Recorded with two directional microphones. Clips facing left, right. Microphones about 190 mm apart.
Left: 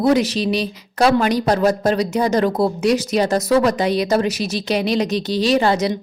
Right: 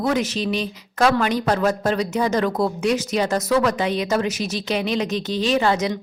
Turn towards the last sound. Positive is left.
turn(degrees=35)  # may be behind; listen again after turning